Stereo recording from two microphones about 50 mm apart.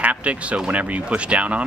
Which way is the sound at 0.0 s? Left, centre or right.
Right.